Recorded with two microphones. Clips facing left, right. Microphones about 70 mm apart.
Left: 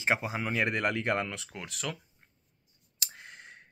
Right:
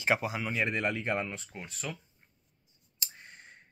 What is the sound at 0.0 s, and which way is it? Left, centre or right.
Speech, left.